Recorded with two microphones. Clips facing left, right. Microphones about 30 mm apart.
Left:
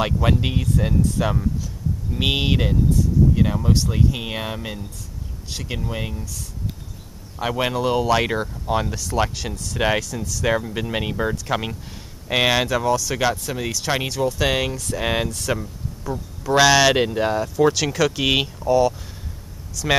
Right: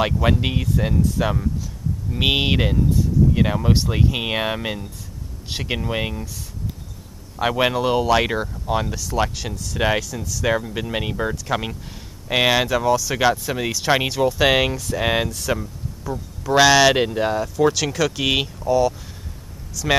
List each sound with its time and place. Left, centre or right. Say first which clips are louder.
0.0 s speech: right 1 dB; centre; by 6.3 s right
7.3 s speech: right 3 dB; centre